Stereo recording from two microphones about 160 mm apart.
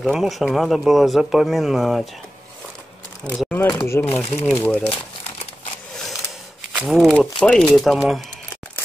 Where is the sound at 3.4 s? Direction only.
10° left (ahead or behind).